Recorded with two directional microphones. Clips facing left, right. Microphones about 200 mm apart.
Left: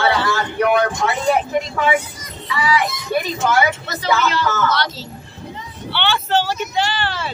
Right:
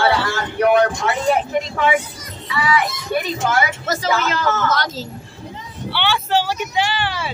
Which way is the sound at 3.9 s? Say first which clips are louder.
Even; 45° right (ahead or behind).